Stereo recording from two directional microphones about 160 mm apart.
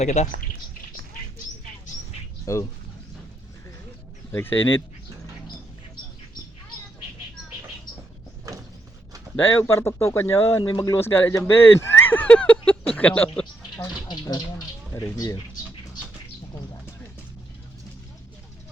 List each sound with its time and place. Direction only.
0.0 s speech: 45° left (ahead or behind)
2.5 s speech: 20° left (ahead or behind)
4.3 s speech: 10° left (ahead or behind)
9.3 s speech: 15° left (ahead or behind)
14.1 s a sound: 25° left (ahead or behind)
15.0 s speech: 20° left (ahead or behind)